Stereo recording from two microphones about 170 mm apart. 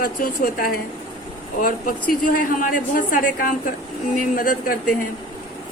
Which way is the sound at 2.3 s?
55° left (ahead or behind).